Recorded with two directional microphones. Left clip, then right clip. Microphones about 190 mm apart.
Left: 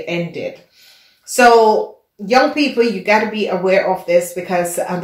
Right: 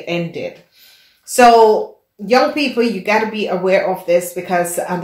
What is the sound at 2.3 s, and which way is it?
Speech, 35° right (ahead or behind).